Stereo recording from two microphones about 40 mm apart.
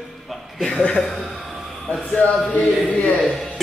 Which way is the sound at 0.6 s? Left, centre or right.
Left.